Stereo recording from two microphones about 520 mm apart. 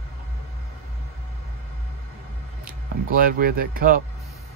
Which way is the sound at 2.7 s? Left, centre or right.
Centre.